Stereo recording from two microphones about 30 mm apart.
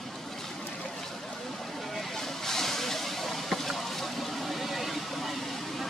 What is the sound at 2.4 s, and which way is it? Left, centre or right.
Vehicle, centre.